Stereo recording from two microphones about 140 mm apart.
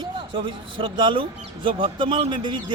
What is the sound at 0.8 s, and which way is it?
A man's voice, 35° right (ahead or behind).